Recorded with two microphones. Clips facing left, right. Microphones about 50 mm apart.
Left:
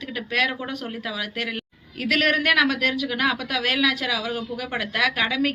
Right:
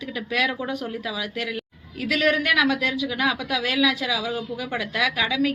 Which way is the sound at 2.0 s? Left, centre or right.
Left.